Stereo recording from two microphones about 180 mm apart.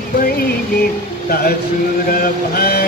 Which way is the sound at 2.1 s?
55° left (ahead or behind).